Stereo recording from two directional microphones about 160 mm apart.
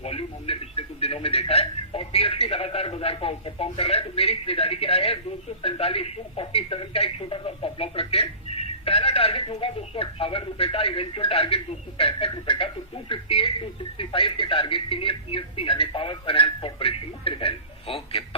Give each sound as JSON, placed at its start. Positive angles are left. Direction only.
{"t": 0.0, "sound": "a man's voice", "side_deg": 35}